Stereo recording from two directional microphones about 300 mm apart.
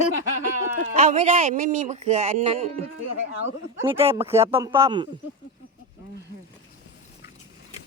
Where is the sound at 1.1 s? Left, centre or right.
Right.